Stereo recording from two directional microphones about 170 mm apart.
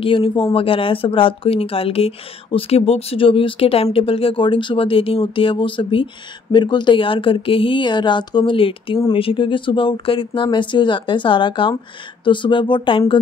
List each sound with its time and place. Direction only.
0.0 s a woman's voice: 30° left (ahead or behind)